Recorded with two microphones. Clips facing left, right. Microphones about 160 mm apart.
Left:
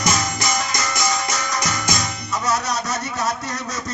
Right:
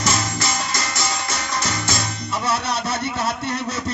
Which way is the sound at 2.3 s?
30° right (ahead or behind).